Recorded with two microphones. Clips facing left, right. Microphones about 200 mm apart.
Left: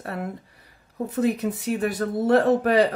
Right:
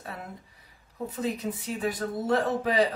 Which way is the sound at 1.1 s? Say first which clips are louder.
Left 8 dB; 65° left (ahead or behind).